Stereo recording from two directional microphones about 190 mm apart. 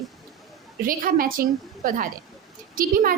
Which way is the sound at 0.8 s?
50° right (ahead or behind).